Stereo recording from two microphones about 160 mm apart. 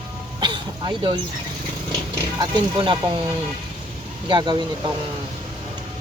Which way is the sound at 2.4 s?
30° right (ahead or behind).